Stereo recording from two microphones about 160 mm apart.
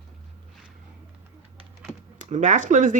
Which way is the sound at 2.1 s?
50° right (ahead or behind).